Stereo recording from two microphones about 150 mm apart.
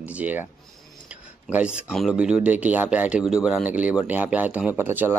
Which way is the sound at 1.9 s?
Centre (ahead or behind).